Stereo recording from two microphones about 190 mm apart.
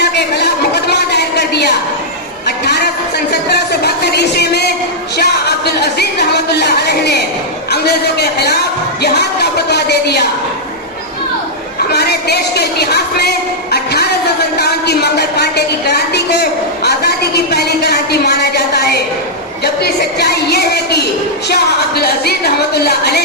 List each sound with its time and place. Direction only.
0.0 s a sound: 60° left (ahead or behind)
5.1 s music: 60° left (ahead or behind)
7.7 s a man's voice: 60° left (ahead or behind)
9.0 s music: 60° left (ahead or behind)
11.9 s speech: 60° left (ahead or behind)
14.6 s a sound: 60° left (ahead or behind)
21.5 s a woman's voice: 55° left (ahead or behind)